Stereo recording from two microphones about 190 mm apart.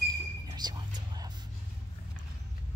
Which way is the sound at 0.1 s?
20° right (ahead or behind).